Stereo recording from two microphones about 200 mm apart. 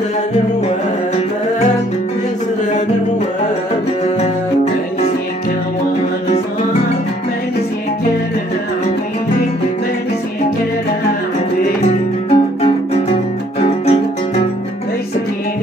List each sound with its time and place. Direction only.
12.3 s music: 30° left (ahead or behind)